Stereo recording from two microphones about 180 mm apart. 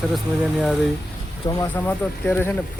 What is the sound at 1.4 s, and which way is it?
Speech, 15° left (ahead or behind).